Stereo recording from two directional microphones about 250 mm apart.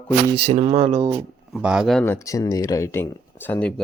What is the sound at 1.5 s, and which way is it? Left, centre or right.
Speech, centre.